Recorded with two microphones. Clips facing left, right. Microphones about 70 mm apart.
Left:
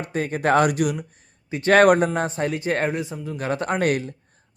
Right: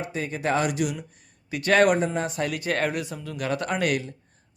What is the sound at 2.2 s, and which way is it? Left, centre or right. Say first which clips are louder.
A man's voice: left 3 dB; left.